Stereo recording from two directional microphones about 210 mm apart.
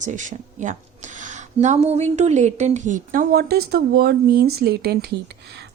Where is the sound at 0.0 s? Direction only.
35° right (ahead or behind).